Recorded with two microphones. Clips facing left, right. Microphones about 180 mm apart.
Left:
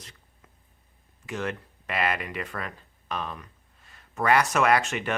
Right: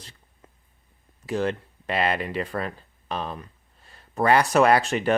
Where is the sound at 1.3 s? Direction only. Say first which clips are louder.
Right 6 dB; 30° right (ahead or behind).